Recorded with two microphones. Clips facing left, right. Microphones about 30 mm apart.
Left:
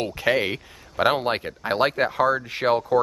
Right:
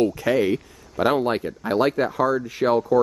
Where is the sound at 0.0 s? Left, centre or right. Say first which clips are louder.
Right 3 dB; left.